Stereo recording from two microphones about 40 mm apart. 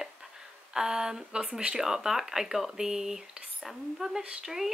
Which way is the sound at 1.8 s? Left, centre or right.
Centre.